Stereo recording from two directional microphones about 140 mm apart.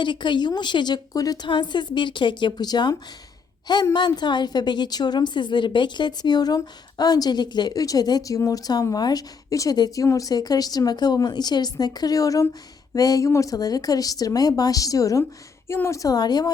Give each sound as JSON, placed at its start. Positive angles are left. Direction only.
{"t": 0.0, "sound": "a woman's voice", "side_deg": 35}
{"t": 3.9, "sound": "a woman's voice", "side_deg": 30}